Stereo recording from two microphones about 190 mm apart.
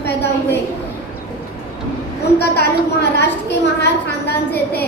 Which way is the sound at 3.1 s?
60° left (ahead or behind).